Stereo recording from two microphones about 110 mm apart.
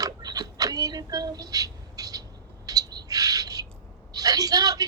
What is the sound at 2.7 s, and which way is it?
Owl, 35° right (ahead or behind).